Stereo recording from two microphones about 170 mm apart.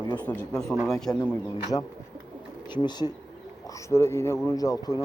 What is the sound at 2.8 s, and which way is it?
A man's voice, 25° left (ahead or behind).